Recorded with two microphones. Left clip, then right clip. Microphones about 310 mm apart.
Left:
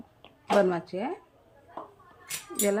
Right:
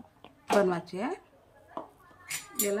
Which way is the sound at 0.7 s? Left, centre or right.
Centre.